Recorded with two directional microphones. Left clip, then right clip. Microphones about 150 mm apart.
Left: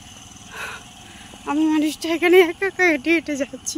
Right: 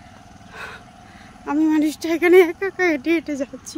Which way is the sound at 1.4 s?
15° right (ahead or behind).